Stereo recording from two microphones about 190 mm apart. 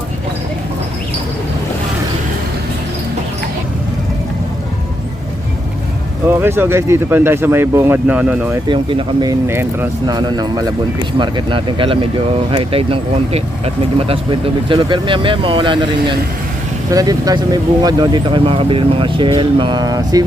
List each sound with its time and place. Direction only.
6.2 s speech: 10° right (ahead or behind)
8.6 s speech: 25° right (ahead or behind)
9.5 s speech: 10° right (ahead or behind)